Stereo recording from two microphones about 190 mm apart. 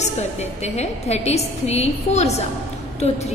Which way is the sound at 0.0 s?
35° left (ahead or behind).